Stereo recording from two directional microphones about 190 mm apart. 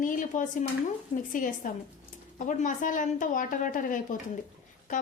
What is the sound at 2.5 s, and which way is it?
A woman's voice, 40° left (ahead or behind).